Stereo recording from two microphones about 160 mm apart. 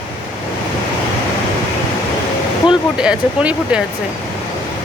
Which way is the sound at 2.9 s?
5° right (ahead or behind).